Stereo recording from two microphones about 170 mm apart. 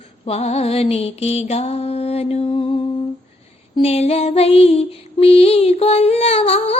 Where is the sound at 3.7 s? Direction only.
35° left (ahead or behind).